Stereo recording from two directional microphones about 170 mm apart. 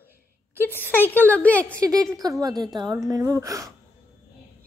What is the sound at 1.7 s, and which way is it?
Speech, 20° right (ahead or behind).